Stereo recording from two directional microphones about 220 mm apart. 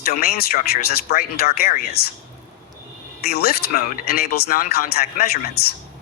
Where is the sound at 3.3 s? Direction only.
45° left (ahead or behind).